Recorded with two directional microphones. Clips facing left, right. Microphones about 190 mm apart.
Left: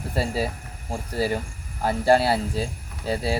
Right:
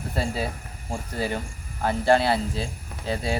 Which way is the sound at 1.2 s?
35° left (ahead or behind).